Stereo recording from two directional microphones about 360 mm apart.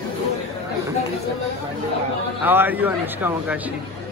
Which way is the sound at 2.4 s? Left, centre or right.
Centre.